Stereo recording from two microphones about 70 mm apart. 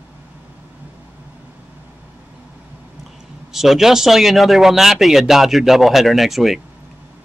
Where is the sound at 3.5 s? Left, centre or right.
Centre.